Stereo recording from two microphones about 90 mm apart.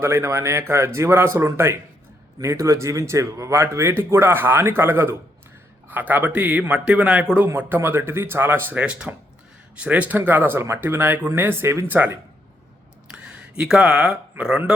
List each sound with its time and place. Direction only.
0.0 s a man's voice: 30° right (ahead or behind)
13.1 s a sound: 10° right (ahead or behind)
13.6 s speech: 10° right (ahead or behind)